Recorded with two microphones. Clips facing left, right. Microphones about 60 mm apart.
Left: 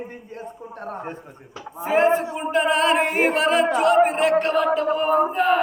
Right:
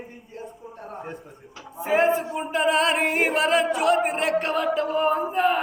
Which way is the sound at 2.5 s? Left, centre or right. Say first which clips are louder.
Left 3 dB; centre.